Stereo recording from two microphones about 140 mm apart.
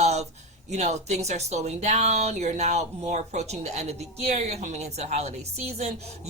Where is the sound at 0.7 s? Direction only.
55° right (ahead or behind).